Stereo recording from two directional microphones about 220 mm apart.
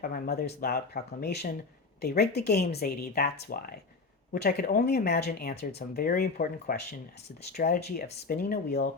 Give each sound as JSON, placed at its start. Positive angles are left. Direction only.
{"t": 0.0, "sound": "speech", "side_deg": 45}